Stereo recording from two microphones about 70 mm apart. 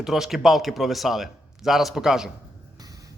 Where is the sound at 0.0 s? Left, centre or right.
Centre.